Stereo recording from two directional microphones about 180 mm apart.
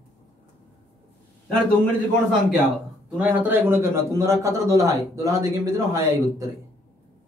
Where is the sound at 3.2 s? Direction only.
10° right (ahead or behind).